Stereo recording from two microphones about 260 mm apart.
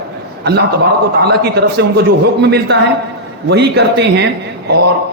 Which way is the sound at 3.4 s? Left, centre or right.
Right.